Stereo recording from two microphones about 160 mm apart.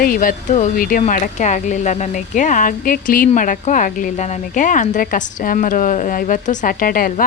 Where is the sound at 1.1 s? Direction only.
50° left (ahead or behind).